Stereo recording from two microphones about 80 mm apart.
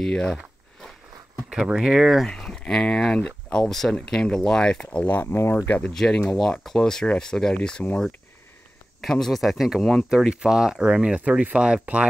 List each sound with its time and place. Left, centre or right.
0.0 s speech: centre
1.5 s speech: centre
2.3 s speech: centre
5.0 s speech: left
5.9 s speech: centre
9.0 s speech: centre